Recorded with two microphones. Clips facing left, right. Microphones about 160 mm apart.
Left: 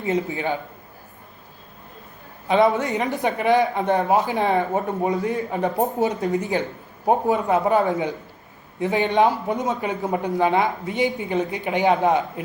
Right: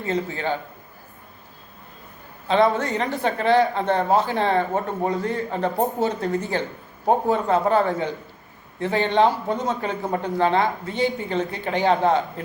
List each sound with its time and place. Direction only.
0.0 s speech: 20° left (ahead or behind)
2.5 s speech: 20° left (ahead or behind)